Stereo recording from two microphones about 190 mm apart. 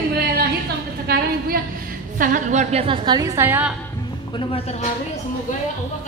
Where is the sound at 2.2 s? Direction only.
40° right (ahead or behind); by 3.8 s 10° right (ahead or behind).